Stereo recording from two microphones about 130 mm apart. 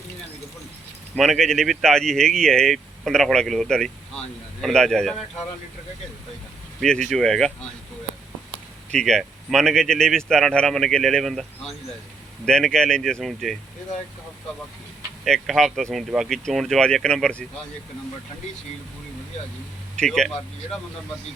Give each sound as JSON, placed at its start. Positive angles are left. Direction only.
{"t": 1.1, "sound": "speech", "side_deg": 0}
{"t": 7.1, "sound": "speech", "side_deg": 5}
{"t": 8.9, "sound": "speech", "side_deg": 5}
{"t": 12.5, "sound": "speech", "side_deg": 5}
{"t": 15.2, "sound": "speech", "side_deg": 0}
{"t": 20.0, "sound": "speech", "side_deg": 5}